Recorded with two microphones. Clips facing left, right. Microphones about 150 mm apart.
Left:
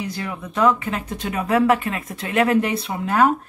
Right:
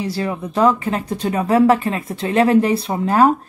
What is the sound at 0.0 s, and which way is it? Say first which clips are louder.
Speech: right 6 dB; 35° right (ahead or behind).